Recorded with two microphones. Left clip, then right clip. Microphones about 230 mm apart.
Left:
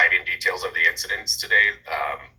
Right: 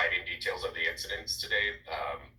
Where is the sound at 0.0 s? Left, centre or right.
Left.